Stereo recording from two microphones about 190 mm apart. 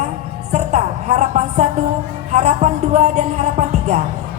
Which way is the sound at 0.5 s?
40° right (ahead or behind).